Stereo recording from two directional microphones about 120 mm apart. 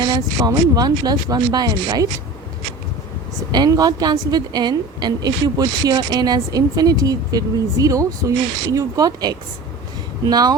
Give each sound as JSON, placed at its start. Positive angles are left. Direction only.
{"t": 0.0, "sound": "a woman's voice", "side_deg": -35}
{"t": 3.5, "sound": "a woman's voice", "side_deg": -35}